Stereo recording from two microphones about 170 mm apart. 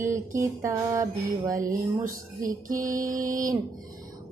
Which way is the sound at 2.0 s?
55° right (ahead or behind).